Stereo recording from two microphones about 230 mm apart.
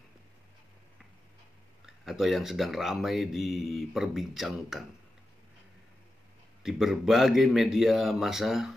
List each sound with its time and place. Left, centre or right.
2.0 s speech: centre
6.6 s speech: centre